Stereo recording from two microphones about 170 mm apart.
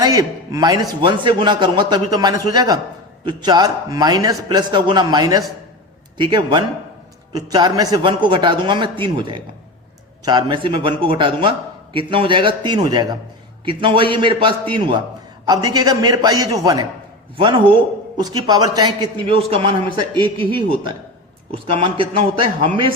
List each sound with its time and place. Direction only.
0.0 s a man's voice: 20° right (ahead or behind)